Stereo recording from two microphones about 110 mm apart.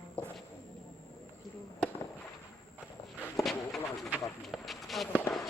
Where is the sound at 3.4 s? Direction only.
Centre (ahead or behind).